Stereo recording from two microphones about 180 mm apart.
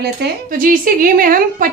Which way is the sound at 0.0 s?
55° right (ahead or behind).